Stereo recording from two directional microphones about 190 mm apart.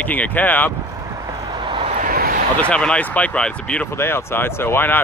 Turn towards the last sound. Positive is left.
turn(degrees=10)  # may be behind; listen again after turning